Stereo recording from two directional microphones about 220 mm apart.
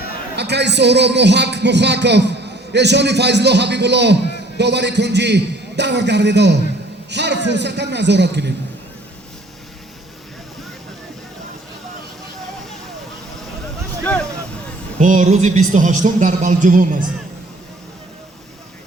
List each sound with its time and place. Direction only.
0.3 s a man's voice: 50° right (ahead or behind)
14.0 s a sound: 5° left (ahead or behind)
14.9 s speech: 35° right (ahead or behind)